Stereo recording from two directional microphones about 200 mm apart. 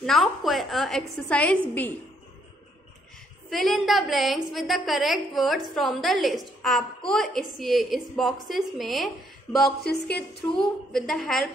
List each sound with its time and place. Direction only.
0.0 s a woman's voice: centre (ahead or behind)
3.4 s a woman's voice: centre (ahead or behind)
9.8 s a sound: 55° left (ahead or behind)
10.6 s a woman's voice: centre (ahead or behind)